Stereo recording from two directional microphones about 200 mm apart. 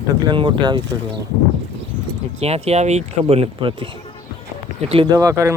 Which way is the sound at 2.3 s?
30° right (ahead or behind).